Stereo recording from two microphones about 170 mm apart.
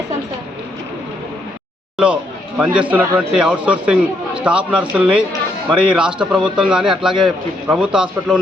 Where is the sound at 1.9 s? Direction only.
5° right (ahead or behind).